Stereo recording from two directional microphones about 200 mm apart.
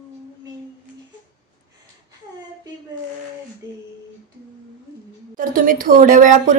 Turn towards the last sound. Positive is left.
turn(degrees=-40)  # may be behind; listen again after turning